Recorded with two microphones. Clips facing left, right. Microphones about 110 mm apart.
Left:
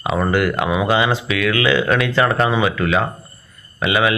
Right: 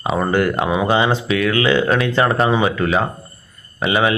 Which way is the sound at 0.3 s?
30° right (ahead or behind).